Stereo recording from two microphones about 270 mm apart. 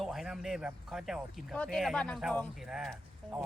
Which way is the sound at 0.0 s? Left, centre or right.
Centre.